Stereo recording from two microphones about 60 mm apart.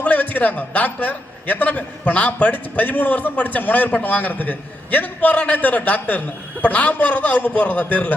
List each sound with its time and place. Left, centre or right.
0.0 s a man's voice: left